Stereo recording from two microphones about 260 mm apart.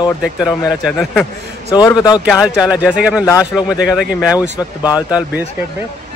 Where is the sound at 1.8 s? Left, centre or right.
Centre.